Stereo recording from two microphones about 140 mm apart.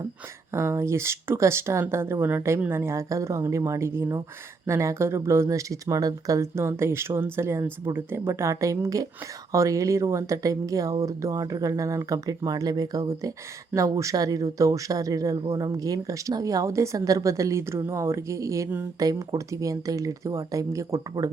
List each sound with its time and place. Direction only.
0.5 s speech: 20° right (ahead or behind)